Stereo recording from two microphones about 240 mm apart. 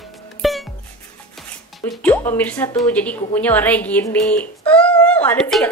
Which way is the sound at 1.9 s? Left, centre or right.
Centre.